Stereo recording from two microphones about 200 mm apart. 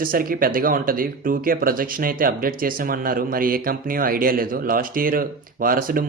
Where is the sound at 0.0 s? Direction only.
45° right (ahead or behind).